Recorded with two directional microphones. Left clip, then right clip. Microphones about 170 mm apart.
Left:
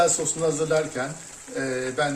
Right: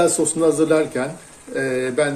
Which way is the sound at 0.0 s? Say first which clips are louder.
Right 5 dB; 50° right (ahead or behind).